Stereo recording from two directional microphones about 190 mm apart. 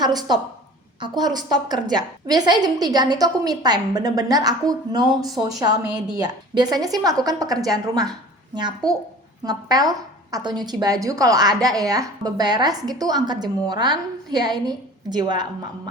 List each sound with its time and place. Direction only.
0.0 s a woman's voice: 20° right (ahead or behind)